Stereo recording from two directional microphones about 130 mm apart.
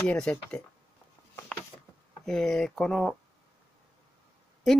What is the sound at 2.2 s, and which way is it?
Speech, 5° left (ahead or behind).